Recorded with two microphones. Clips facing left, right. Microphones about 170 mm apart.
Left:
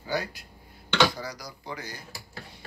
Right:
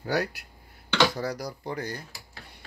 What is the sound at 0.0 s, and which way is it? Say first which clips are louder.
A man's voice: right 3 dB; 70° right (ahead or behind).